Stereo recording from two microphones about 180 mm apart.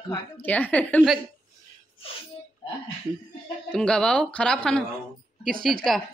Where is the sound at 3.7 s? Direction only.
5° left (ahead or behind).